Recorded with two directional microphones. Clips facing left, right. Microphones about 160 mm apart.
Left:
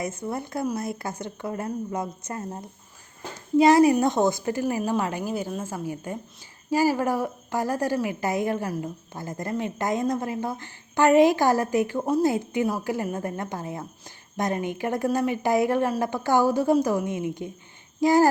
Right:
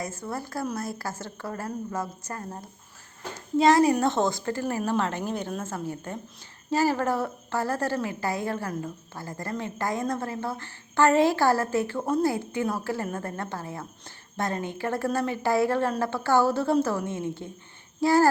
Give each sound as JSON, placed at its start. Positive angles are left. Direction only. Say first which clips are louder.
{"t": 0.0, "sound": "a woman's voice", "louder": "left 3 dB", "side_deg": 20}
{"t": 3.9, "sound": "a woman's voice", "louder": "left 3 dB", "side_deg": 15}